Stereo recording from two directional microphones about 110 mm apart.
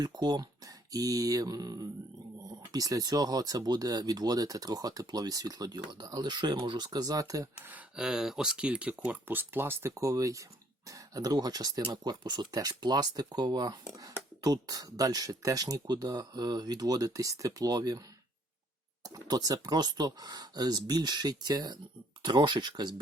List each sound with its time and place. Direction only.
0.0 s speech: 40° right (ahead or behind)
7.7 s speech: 5° right (ahead or behind); by 18.0 s 35° right (ahead or behind)
19.0 s speech: 35° right (ahead or behind)